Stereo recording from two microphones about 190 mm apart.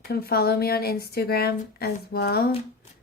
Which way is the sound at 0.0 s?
55° left (ahead or behind).